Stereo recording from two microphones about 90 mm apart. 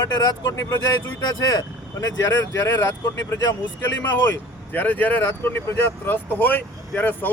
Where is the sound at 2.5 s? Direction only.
30° left (ahead or behind).